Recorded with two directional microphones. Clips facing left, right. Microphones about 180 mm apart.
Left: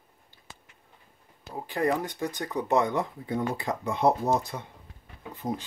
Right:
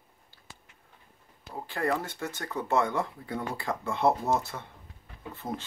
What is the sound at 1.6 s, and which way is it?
Speech, 15° left (ahead or behind).